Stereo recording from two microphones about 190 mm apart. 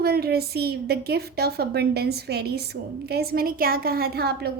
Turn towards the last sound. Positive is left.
turn(degrees=-55)  # may be behind; listen again after turning